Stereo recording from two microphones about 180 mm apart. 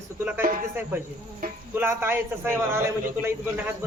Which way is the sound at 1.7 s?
10° right (ahead or behind).